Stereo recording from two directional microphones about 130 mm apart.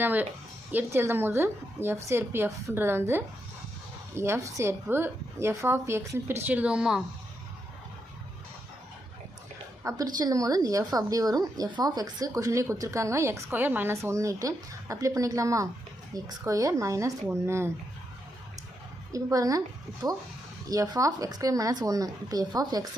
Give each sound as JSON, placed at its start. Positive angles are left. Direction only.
{"t": 0.0, "sound": "a woman's voice", "side_deg": -15}
{"t": 9.8, "sound": "a woman's voice", "side_deg": -25}
{"t": 19.1, "sound": "a woman's voice", "side_deg": -25}